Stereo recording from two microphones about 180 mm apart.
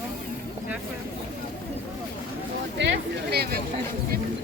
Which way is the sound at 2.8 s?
70° right (ahead or behind).